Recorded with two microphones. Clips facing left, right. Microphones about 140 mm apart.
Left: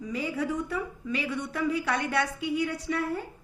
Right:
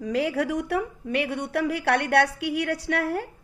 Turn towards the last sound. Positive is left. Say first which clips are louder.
# right 4 dB
turn(degrees=-75)  # may be behind; listen again after turning